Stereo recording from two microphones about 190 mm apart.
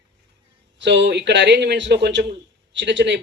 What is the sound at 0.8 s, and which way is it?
A man's voice, 65° right (ahead or behind).